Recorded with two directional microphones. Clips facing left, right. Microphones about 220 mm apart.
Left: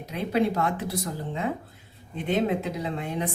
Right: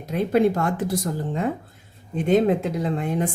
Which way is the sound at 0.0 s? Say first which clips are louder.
Right 6 dB; 45° right (ahead or behind).